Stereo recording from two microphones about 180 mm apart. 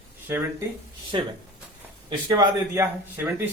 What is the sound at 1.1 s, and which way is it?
Speech, 25° right (ahead or behind).